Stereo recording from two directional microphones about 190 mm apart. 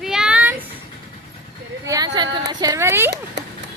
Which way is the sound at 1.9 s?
20° right (ahead or behind).